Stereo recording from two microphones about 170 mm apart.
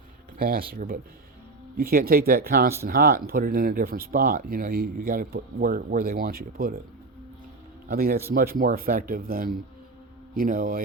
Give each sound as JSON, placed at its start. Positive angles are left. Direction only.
{"t": 0.3, "sound": "speech", "side_deg": -60}
{"t": 7.9, "sound": "speech", "side_deg": -60}